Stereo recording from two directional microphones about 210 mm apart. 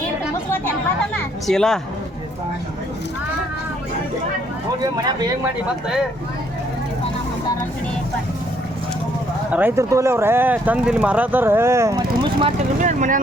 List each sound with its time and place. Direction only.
1.5 s a woman's voice: centre (ahead or behind)
4.8 s speech: 20° right (ahead or behind)
9.5 s speech: 10° right (ahead or behind)
12.8 s speech: 35° right (ahead or behind)